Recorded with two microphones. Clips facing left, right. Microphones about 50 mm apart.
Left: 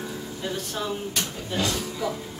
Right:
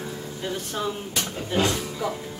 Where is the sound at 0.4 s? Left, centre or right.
Centre.